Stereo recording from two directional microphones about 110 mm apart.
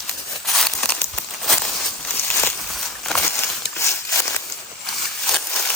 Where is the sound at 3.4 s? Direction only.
25° left (ahead or behind).